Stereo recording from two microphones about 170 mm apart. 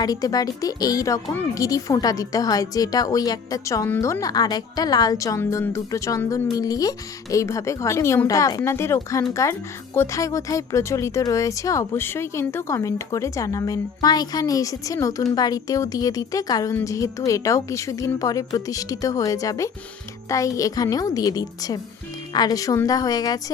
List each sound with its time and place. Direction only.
0.0 s speech: 20° left (ahead or behind)